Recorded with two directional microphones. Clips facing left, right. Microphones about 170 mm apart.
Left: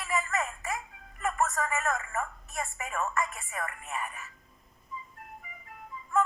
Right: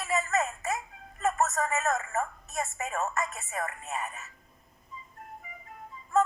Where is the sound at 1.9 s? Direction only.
40° right (ahead or behind).